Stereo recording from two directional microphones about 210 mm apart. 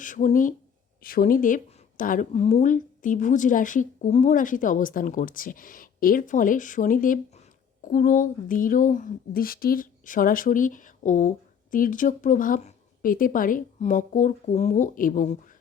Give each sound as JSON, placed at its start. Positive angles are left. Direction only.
{"t": 0.0, "sound": "speech", "side_deg": 40}